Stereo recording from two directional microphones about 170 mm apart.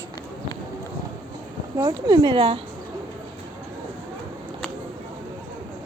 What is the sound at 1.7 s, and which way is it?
Speech, 25° right (ahead or behind).